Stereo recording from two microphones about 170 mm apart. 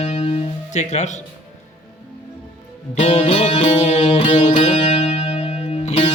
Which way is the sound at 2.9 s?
40° left (ahead or behind).